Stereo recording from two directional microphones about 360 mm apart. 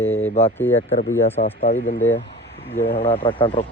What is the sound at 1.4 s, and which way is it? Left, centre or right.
Speech, left.